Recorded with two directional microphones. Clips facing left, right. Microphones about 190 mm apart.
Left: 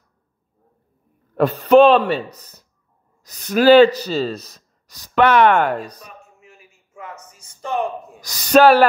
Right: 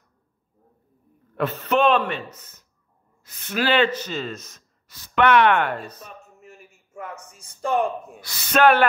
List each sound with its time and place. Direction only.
1.3 s speech: 40° left (ahead or behind)
5.9 s speech: 15° left (ahead or behind)
6.2 s a sound: 40° right (ahead or behind)
8.2 s speech: 40° left (ahead or behind)